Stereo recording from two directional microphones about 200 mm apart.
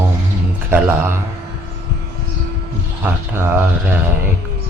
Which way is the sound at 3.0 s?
10° right (ahead or behind).